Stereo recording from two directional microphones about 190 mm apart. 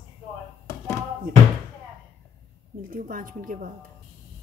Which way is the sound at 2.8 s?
45° right (ahead or behind).